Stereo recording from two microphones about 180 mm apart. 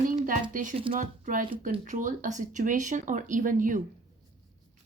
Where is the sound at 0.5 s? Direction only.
45° right (ahead or behind).